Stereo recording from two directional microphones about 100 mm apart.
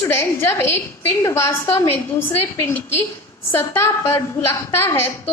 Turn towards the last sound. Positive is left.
turn(degrees=20)  # may be behind; listen again after turning